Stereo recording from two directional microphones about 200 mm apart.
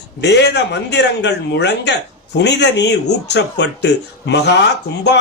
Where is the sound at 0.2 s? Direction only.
60° left (ahead or behind).